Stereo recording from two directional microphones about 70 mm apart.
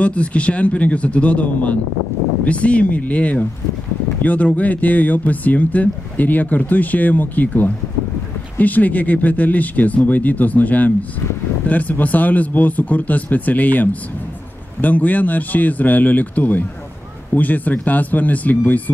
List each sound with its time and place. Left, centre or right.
0.0 s speech: centre